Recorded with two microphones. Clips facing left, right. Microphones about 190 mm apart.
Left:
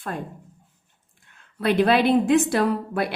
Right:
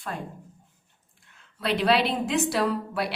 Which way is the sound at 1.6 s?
55° left (ahead or behind).